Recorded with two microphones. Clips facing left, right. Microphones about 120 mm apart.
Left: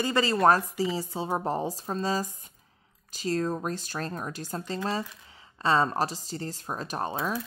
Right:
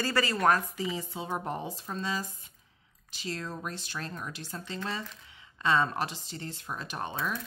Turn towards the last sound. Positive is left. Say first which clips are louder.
# left 4 dB
turn(degrees=35)  # may be behind; listen again after turning